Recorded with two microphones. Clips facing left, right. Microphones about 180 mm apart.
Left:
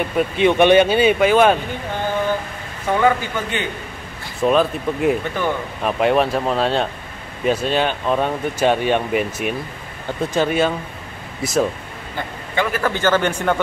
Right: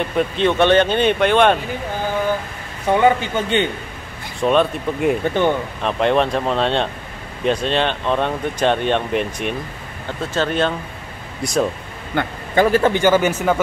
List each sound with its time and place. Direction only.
0.0 s speech: 10° left (ahead or behind)
2.9 s speech: 20° right (ahead or behind)
4.4 s speech: centre (ahead or behind)
5.2 s speech: 25° right (ahead or behind)
5.8 s speech: 5° left (ahead or behind)
12.2 s a man's voice: 70° right (ahead or behind)
12.5 s speech: 30° right (ahead or behind)
12.9 s speech: 10° right (ahead or behind)